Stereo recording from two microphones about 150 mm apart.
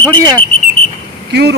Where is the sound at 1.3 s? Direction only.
90° right.